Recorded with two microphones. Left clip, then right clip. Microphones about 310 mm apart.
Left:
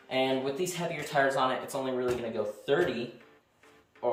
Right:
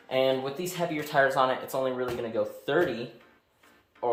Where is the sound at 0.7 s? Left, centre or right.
Centre.